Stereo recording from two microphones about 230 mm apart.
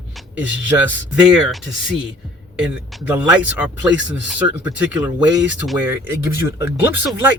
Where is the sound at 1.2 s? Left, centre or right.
Centre.